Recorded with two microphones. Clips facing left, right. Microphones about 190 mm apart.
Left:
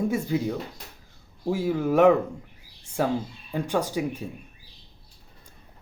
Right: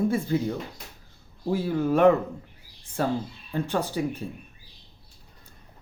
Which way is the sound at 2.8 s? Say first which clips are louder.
Left 1 dB; 10° left (ahead or behind).